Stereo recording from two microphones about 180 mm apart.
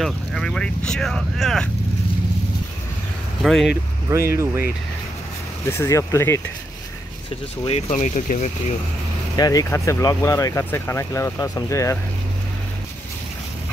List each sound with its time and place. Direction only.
0.0 s speech: centre (ahead or behind)
3.4 s speech: centre (ahead or behind)
4.1 s speech: 15° right (ahead or behind)
5.7 s speech: 15° left (ahead or behind)
7.6 s speech: 35° left (ahead or behind)
9.4 s speech: 20° left (ahead or behind)